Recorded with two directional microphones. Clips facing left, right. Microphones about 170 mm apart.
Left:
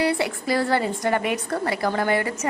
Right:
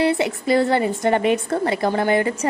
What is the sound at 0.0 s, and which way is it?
A woman's voice, 20° right (ahead or behind).